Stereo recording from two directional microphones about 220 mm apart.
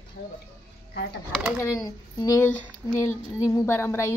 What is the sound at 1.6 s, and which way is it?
Speech, 15° left (ahead or behind).